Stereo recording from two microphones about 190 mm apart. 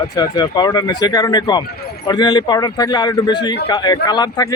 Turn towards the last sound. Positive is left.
turn(degrees=20)  # may be behind; listen again after turning